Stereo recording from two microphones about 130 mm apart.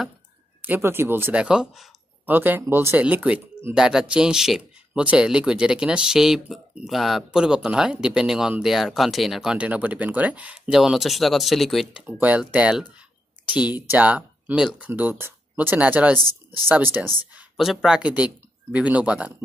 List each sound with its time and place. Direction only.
0.6 s speech: 15° right (ahead or behind); by 12.0 s centre (ahead or behind)
12.2 s speech: 10° right (ahead or behind)
17.4 s speech: 5° right (ahead or behind)